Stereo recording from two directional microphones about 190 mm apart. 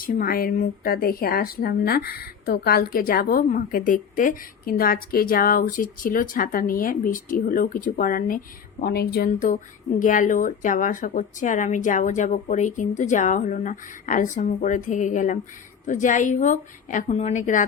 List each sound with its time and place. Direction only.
0.0 s a woman's voice: 50° left (ahead or behind)